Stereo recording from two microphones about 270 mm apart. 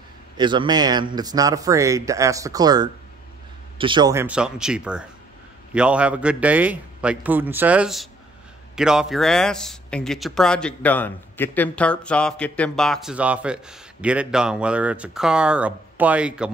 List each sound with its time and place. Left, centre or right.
0.4 s a man's voice: centre